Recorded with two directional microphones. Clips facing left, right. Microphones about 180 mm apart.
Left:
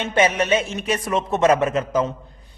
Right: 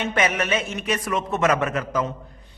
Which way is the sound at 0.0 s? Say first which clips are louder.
Left 4 dB; 30° left (ahead or behind).